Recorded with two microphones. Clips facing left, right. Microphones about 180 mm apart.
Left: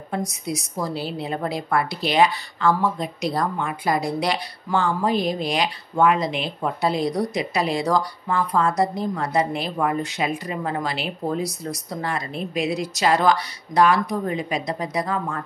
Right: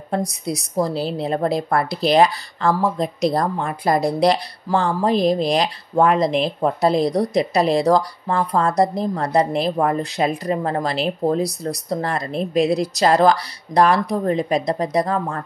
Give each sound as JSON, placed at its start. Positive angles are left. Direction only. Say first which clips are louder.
{"t": 0.1, "sound": "a woman's voice", "louder": "right 4 dB", "side_deg": -35}